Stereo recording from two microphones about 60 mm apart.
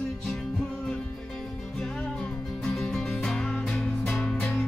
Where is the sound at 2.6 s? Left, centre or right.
Centre.